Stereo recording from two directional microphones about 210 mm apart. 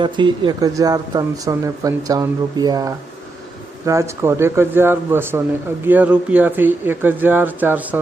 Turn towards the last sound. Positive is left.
turn(degrees=-10)  # may be behind; listen again after turning